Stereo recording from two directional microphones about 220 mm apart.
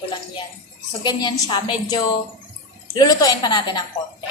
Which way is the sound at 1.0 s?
20° left (ahead or behind).